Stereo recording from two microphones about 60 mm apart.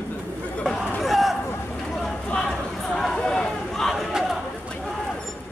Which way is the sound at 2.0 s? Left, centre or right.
Centre.